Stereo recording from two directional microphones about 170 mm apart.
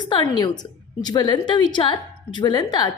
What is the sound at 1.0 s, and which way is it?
A woman's voice, 25° left (ahead or behind).